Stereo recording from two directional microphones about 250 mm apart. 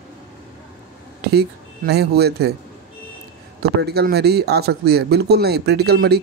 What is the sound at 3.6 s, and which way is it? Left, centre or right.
Speech, right.